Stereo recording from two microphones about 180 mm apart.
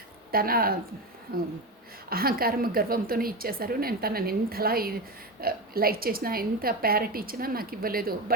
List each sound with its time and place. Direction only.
0.3 s a woman's voice: 55° right (ahead or behind)
2.0 s a woman's voice: 55° right (ahead or behind)